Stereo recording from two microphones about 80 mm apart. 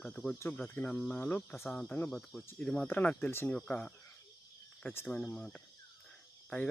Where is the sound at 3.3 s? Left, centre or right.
Left.